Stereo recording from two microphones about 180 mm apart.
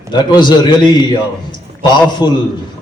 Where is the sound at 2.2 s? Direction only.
20° left (ahead or behind).